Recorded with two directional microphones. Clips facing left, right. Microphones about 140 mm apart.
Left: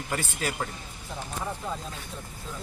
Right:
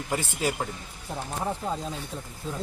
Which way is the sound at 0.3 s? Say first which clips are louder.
Right 3 dB; 20° right (ahead or behind).